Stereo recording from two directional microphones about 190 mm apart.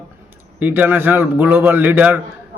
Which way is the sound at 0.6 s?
10° right (ahead or behind).